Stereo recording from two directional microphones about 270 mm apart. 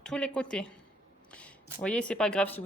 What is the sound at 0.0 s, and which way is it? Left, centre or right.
Speech, centre.